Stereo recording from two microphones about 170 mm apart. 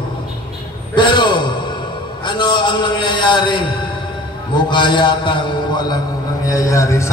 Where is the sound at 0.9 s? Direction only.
25° left (ahead or behind).